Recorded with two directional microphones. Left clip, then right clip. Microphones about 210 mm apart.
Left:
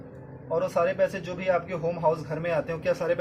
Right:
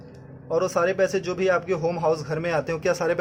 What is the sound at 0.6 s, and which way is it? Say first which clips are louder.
A man's voice: right 2 dB; 50° right (ahead or behind).